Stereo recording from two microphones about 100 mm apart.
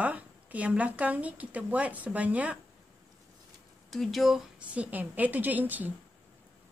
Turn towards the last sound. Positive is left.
turn(degrees=-15)  # may be behind; listen again after turning